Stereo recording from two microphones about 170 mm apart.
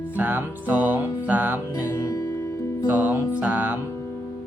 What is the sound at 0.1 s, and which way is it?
Music, 10° right (ahead or behind).